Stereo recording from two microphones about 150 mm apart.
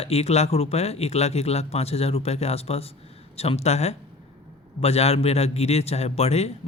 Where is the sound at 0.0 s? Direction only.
45° left (ahead or behind).